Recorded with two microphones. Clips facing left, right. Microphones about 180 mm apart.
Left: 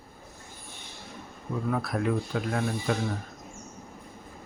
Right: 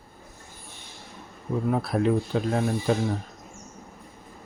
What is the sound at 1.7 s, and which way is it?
Speech, 30° right (ahead or behind).